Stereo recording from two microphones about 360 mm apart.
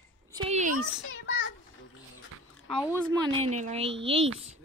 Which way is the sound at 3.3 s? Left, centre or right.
Centre.